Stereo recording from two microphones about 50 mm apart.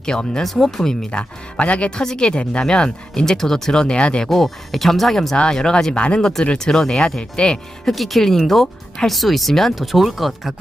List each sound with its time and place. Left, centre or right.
0.0 s speech: centre
0.4 s speech: centre
1.5 s speech: left
2.0 s speech: centre
4.3 s speech: centre
7.9 s speech: centre